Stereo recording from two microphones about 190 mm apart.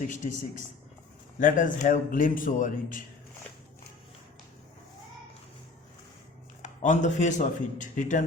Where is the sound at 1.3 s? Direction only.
45° left (ahead or behind).